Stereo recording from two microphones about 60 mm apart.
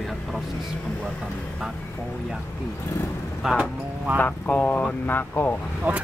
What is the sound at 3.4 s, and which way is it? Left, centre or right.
Speech, centre.